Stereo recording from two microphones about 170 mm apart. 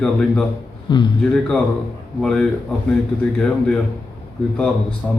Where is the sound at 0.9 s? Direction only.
25° left (ahead or behind).